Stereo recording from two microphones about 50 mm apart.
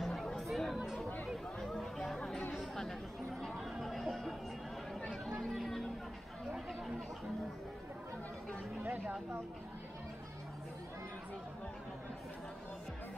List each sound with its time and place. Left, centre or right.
0.0 s chatter: centre
0.7 s chatter: centre
1.2 s chatter: centre
3.7 s music: centre
5.0 s chatter: centre
5.5 s a sound: centre
8.8 s a sound: right